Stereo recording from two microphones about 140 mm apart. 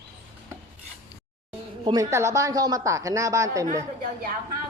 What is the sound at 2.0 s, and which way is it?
Speech, 20° right (ahead or behind).